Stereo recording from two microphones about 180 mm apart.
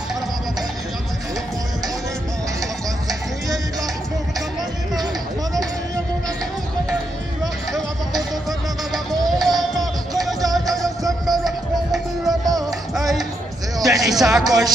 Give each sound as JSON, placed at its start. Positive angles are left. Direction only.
{"t": 3.1, "sound": "music", "side_deg": 0}
{"t": 7.7, "sound": "music", "side_deg": 0}
{"t": 12.9, "sound": "a sound", "side_deg": 0}
{"t": 14.4, "sound": "speech", "side_deg": -20}